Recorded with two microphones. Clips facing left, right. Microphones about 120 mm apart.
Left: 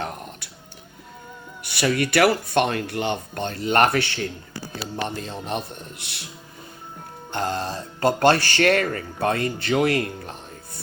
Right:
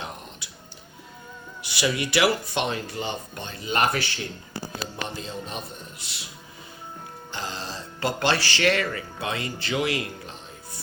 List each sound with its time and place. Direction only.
0.0 s a sound: 55° left (ahead or behind)
1.7 s speech: 55° left (ahead or behind)
5.0 s speech: 55° left (ahead or behind)
7.3 s speech: 55° left (ahead or behind)